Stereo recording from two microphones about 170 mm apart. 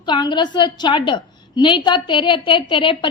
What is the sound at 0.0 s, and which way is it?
A woman's voice, 25° left (ahead or behind).